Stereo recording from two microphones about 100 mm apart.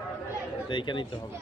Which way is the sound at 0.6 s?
55° left (ahead or behind).